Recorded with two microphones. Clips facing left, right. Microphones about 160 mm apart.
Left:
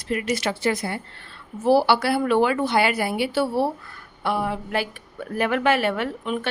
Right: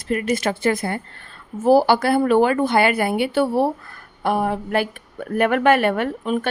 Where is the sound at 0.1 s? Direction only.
50° right (ahead or behind).